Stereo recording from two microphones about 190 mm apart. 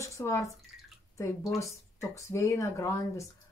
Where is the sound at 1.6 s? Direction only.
15° left (ahead or behind).